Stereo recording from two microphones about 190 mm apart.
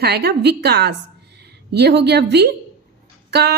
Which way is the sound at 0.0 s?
60° right (ahead or behind).